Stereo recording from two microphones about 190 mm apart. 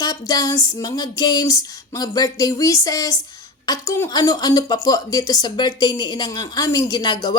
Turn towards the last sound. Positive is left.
turn(degrees=20)  # may be behind; listen again after turning